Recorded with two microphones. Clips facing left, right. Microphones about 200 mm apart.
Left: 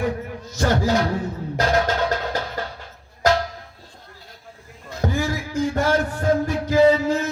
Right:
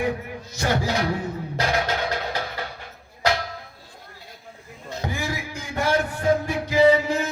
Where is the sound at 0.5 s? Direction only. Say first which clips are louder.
Left 4 dB; 45° left (ahead or behind).